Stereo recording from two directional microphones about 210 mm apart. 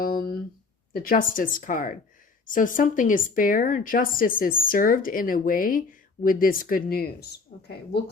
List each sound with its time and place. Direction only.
0.9 s a woman's voice: 40° left (ahead or behind)